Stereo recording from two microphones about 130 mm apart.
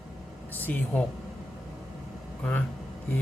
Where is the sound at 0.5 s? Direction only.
15° left (ahead or behind).